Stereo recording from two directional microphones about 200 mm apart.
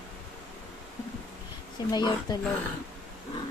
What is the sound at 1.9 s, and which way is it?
Speech, 20° left (ahead or behind).